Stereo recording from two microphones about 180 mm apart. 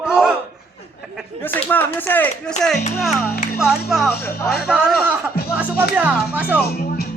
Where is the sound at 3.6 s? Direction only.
Centre (ahead or behind).